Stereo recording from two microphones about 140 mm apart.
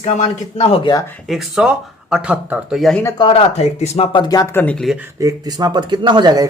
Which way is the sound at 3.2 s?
40° left (ahead or behind).